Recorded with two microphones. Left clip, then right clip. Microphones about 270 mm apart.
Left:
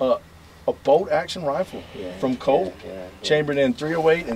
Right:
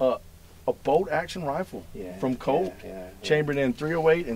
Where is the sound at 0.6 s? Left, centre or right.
Right.